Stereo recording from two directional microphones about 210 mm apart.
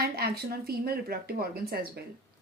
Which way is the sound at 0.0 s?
45° right (ahead or behind).